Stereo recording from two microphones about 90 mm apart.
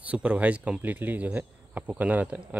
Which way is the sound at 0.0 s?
15° right (ahead or behind).